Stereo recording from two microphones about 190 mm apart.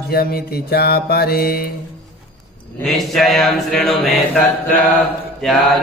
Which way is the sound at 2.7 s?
Centre (ahead or behind).